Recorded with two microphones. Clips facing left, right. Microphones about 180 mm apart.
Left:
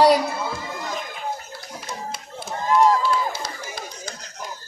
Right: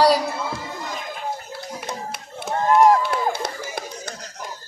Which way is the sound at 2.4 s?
55° right (ahead or behind).